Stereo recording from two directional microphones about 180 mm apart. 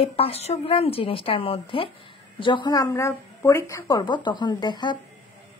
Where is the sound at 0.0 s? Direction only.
35° left (ahead or behind).